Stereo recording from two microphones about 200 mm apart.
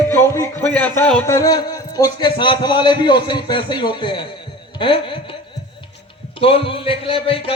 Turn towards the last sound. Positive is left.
turn(degrees=25)  # may be behind; listen again after turning